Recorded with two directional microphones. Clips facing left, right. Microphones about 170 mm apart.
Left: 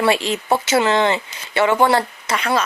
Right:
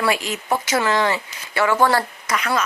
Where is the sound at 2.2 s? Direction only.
30° left (ahead or behind).